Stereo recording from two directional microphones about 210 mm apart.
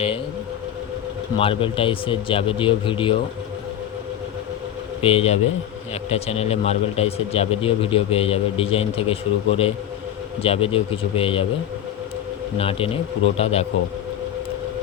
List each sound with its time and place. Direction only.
1.4 s speech: 25° left (ahead or behind)
5.0 s speech: 30° left (ahead or behind)
12.5 s speech: 25° left (ahead or behind)